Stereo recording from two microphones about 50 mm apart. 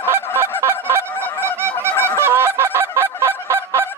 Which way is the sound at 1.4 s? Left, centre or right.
Right.